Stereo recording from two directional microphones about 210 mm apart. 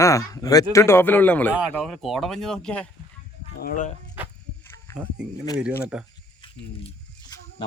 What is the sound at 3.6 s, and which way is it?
Speech, 35° left (ahead or behind).